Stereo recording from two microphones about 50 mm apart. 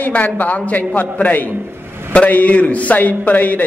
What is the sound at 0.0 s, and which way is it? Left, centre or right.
A man's voice, left.